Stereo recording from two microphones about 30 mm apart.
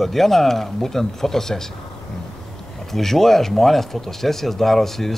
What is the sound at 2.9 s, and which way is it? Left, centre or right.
Speech, centre.